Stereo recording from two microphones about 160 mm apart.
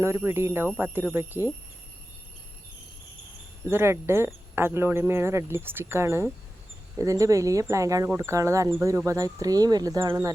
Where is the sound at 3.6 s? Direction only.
15° right (ahead or behind).